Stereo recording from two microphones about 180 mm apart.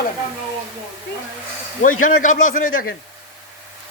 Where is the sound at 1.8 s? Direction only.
45° left (ahead or behind).